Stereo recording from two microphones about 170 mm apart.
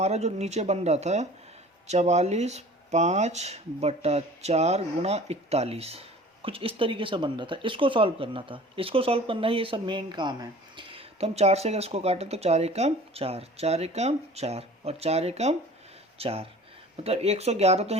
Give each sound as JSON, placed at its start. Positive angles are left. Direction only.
{"t": 0.0, "sound": "speech", "side_deg": -40}